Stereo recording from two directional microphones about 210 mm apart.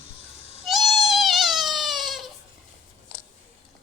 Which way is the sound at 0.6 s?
Centre (ahead or behind).